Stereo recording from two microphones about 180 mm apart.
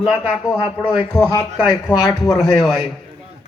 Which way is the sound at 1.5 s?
5° right (ahead or behind).